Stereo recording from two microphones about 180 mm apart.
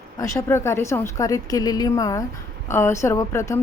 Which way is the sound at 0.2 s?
15° left (ahead or behind).